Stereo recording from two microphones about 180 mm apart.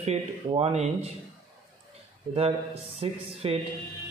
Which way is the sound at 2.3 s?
30° right (ahead or behind).